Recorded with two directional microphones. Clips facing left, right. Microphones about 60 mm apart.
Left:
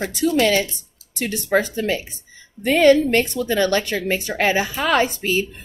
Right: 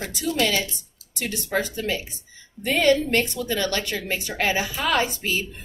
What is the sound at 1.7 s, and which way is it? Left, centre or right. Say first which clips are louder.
Speech: left 5 dB; left.